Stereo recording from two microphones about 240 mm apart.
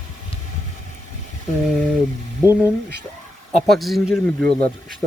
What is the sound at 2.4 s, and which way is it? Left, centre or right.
Speech, centre.